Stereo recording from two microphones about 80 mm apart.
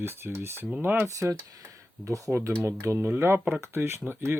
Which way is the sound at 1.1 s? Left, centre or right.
Right.